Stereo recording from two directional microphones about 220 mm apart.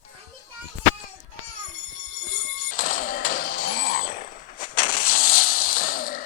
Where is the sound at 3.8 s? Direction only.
40° left (ahead or behind).